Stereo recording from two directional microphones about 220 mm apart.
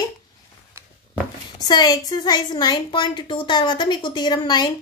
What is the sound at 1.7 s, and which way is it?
A woman's voice, 20° left (ahead or behind).